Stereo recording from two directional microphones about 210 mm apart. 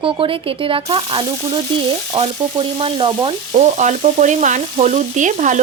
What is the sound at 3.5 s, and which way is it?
Frying, 35° right (ahead or behind).